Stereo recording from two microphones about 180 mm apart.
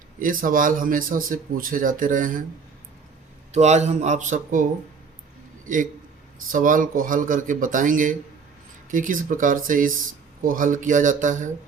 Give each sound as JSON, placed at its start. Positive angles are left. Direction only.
{"t": 0.2, "sound": "speech", "side_deg": -50}
{"t": 3.5, "sound": "a man's voice", "side_deg": -40}
{"t": 5.6, "sound": "speech", "side_deg": -45}